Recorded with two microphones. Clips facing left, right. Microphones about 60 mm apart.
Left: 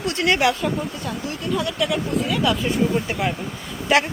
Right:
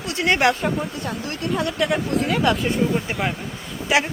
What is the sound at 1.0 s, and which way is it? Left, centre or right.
Speech, right.